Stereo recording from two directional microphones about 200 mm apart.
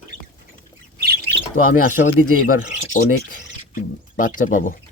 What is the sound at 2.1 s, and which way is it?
Speech, 90° left.